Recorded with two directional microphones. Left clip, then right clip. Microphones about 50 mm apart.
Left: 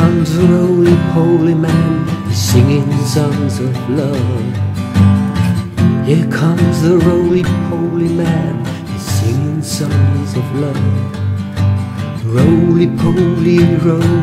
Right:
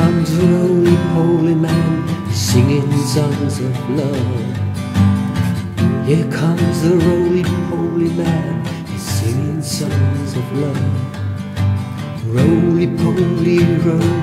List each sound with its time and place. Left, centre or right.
0.0 s music: left
6.0 s music: left
12.4 s music: left